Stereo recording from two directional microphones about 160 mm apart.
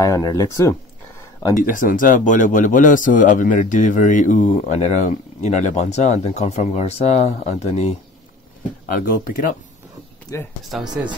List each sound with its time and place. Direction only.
0.0 s speech: 25° left (ahead or behind)
1.6 s speech: 55° left (ahead or behind)
9.0 s speech: 60° left (ahead or behind)
10.3 s speech: 20° left (ahead or behind)
10.7 s speech: centre (ahead or behind)